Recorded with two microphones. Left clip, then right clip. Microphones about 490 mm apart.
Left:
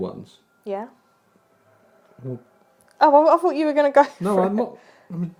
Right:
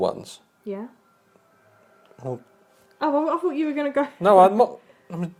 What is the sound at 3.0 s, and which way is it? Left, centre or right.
A woman's voice, left.